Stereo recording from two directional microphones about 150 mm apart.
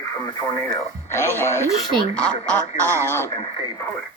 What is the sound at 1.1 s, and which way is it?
Speech, 15° left (ahead or behind).